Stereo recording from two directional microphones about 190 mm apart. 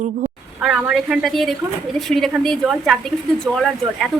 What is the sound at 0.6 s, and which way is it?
Speech, centre (ahead or behind).